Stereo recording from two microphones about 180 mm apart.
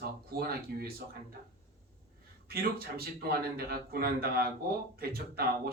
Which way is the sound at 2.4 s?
60° right (ahead or behind).